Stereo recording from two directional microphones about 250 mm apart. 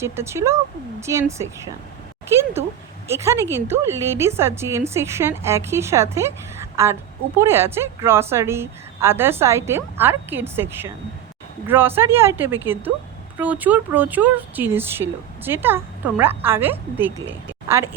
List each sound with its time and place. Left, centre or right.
0.0 s speech: centre